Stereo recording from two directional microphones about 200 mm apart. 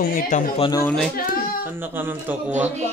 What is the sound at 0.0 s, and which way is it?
Speech, 45° left (ahead or behind).